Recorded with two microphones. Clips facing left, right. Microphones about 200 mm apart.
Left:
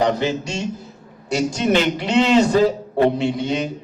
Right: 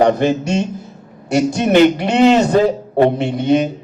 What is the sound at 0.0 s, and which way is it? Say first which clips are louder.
A man's voice: right 6 dB; 55° right (ahead or behind).